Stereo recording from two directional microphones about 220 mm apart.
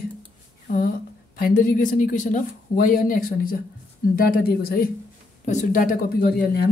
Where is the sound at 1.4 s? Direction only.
40° left (ahead or behind).